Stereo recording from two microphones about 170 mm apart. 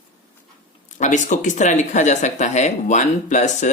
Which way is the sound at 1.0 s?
45° left (ahead or behind).